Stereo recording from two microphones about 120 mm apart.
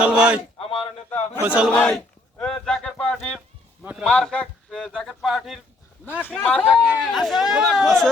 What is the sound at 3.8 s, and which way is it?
Speech, 15° right (ahead or behind).